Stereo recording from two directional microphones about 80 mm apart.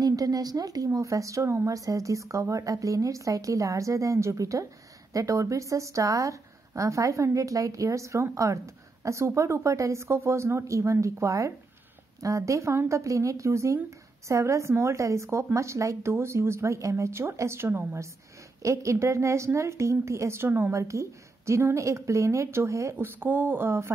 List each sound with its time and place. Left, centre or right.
0.0 s a woman's voice: right
18.6 s speech: right
20.8 s speech: right
23.0 s speech: right